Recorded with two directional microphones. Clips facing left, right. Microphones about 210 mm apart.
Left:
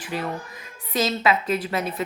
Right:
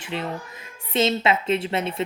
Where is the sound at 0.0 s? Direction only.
25° right (ahead or behind).